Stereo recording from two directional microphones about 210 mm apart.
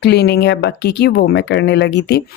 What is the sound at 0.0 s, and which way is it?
Speech, 50° left (ahead or behind).